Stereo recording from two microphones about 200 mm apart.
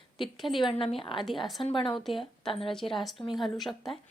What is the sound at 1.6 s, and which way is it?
Speech, 25° left (ahead or behind).